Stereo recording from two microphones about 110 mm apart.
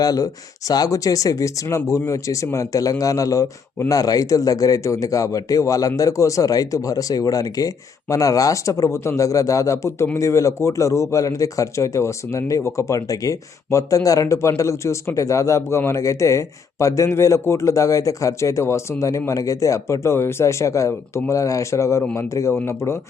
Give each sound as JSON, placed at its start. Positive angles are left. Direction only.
{"t": 0.0, "sound": "a man's voice", "side_deg": 35}